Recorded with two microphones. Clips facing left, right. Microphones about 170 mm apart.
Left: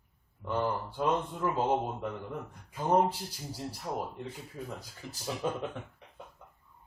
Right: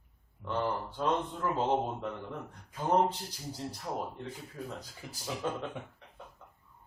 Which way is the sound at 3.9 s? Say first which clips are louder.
Left 1 dB; 5° left (ahead or behind).